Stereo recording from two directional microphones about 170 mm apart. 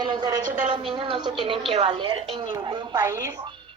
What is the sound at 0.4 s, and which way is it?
Speech, 45° right (ahead or behind).